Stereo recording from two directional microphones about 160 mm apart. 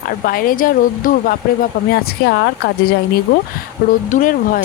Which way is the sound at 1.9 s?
75° left (ahead or behind).